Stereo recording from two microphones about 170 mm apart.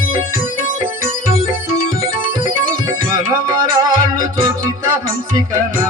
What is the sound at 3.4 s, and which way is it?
Music, 25° right (ahead or behind).